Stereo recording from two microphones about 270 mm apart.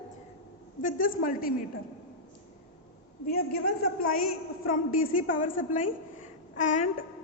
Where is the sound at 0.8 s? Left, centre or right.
Left.